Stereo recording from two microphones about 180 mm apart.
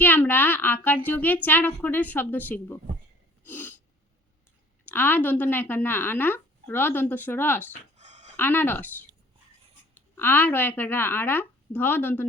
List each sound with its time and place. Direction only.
0.0 s a child's voice: 10° left (ahead or behind)
3.4 s sneeze: 10° left (ahead or behind)
4.9 s a child's voice: 10° left (ahead or behind)
7.9 s a sound: 40° right (ahead or behind)
8.4 s a child's voice: 10° left (ahead or behind)
10.2 s a child's voice: 10° left (ahead or behind)